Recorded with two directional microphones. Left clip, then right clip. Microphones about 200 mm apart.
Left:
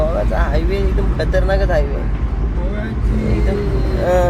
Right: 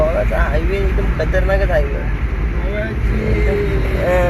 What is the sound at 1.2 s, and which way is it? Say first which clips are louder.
Speech: even; 15° left (ahead or behind).